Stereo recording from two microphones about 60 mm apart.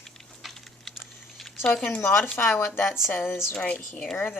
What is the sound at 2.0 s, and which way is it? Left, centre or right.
Speech, left.